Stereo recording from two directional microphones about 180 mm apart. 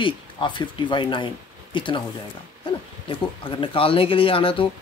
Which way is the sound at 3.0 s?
30° left (ahead or behind).